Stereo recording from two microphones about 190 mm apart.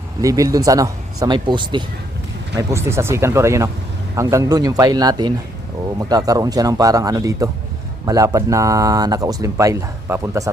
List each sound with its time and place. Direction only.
0.2 s speech: 15° right (ahead or behind)